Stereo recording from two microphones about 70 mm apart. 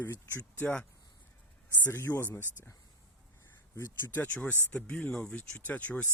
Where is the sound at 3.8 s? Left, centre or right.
Left.